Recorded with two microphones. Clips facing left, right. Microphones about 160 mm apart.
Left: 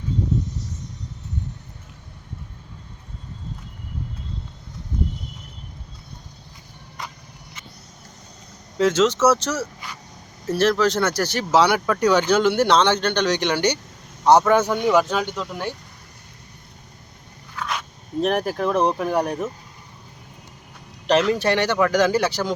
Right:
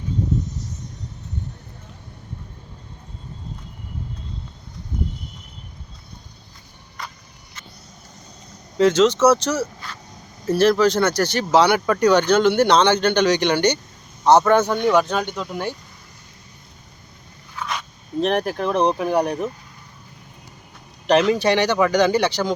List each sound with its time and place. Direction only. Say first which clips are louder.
7.0 s a sound: even; 15° left (ahead or behind)
8.8 s speech: right 3 dB; 5° left (ahead or behind)
17.6 s speech: even; centre (ahead or behind)
21.1 s speech: right 2 dB; centre (ahead or behind)